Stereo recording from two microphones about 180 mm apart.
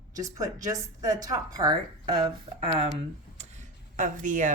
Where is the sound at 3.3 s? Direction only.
40° right (ahead or behind).